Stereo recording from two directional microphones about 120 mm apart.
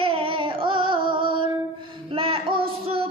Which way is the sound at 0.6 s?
45° right (ahead or behind).